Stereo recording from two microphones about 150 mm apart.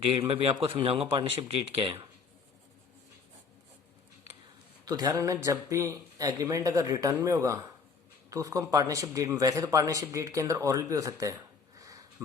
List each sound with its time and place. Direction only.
0.3 s speech: 40° right (ahead or behind)
4.9 s a man's voice: 25° right (ahead or behind)